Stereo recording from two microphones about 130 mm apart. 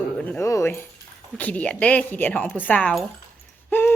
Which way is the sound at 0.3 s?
20° left (ahead or behind).